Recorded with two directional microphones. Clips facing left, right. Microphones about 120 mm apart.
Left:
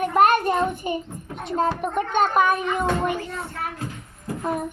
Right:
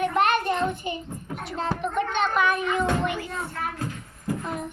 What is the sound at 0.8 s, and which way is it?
Speech, 45° left (ahead or behind).